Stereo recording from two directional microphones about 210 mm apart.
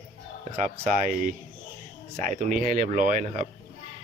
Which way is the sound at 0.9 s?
40° right (ahead or behind).